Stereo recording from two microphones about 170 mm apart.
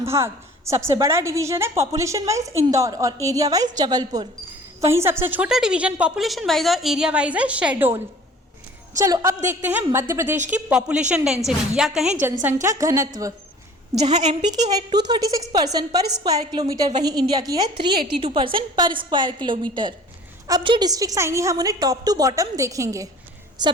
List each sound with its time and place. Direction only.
0.0 s a woman's voice: 15° right (ahead or behind)
14.0 s a woman's voice: 40° right (ahead or behind)
14.7 s a woman's voice: 25° right (ahead or behind)